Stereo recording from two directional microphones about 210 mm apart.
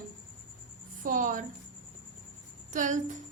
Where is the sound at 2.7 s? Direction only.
35° right (ahead or behind).